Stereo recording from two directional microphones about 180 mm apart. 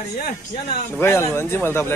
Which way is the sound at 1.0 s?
15° left (ahead or behind).